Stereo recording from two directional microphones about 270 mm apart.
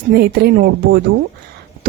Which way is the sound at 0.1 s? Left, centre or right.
Right.